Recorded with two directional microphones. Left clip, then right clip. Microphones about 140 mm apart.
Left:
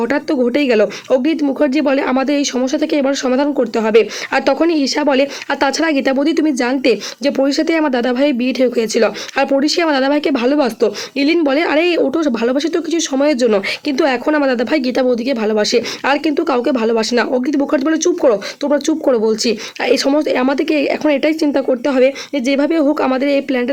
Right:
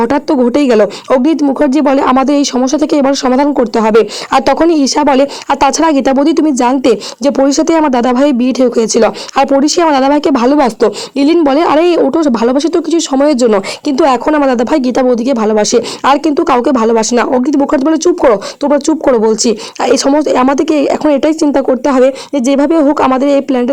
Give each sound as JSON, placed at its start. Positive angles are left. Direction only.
{"t": 0.0, "sound": "speech", "side_deg": -35}